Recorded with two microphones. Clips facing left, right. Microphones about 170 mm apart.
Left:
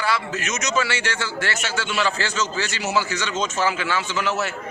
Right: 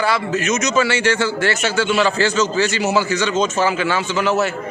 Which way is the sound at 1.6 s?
50° right (ahead or behind).